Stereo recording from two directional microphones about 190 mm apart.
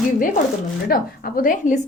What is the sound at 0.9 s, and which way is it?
Speech, 50° left (ahead or behind).